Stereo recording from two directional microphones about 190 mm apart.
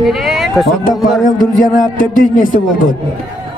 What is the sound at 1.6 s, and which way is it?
Speech, 45° left (ahead or behind).